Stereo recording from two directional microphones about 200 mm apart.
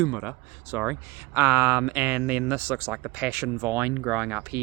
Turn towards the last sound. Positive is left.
turn(degrees=-10)  # may be behind; listen again after turning